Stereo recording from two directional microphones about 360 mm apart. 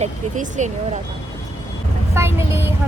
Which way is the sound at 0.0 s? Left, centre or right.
Centre.